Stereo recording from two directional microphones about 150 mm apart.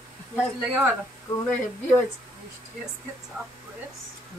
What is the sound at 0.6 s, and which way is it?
Speech, 10° right (ahead or behind).